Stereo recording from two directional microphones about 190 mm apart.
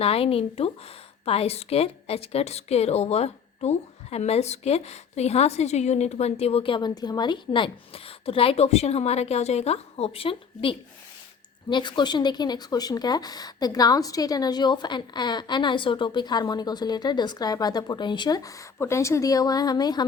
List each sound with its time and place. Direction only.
0.0 s a woman's voice: 30° left (ahead or behind)